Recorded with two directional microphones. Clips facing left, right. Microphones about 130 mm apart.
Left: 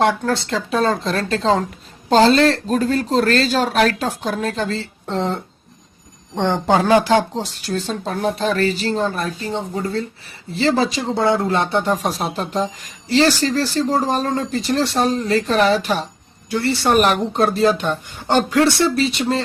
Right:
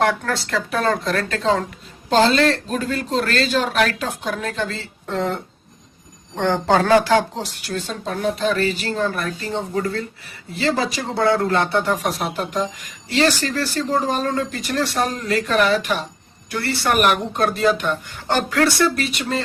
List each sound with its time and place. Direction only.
0.3 s speech: 20° left (ahead or behind)
7.7 s speech: 35° left (ahead or behind)